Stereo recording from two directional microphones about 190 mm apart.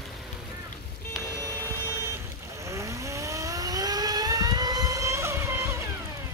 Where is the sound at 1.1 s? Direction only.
15° right (ahead or behind).